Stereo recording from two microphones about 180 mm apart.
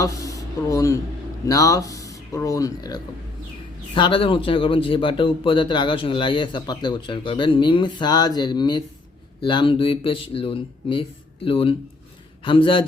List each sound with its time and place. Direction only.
0.0 s a man's voice: 20° left (ahead or behind)